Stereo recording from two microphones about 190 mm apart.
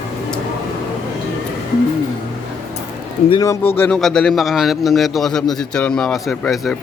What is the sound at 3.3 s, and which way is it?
A man's voice, 15° left (ahead or behind).